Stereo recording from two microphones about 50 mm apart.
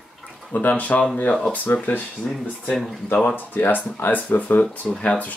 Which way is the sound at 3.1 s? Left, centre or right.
Left.